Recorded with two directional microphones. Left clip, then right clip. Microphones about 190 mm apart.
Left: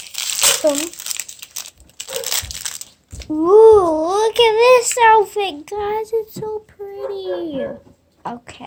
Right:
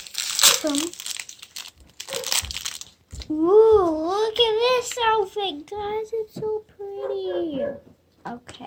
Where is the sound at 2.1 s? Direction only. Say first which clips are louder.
Left 2 dB; 15° left (ahead or behind).